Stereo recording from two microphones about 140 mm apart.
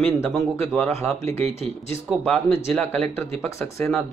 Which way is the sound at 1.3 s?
50° right (ahead or behind).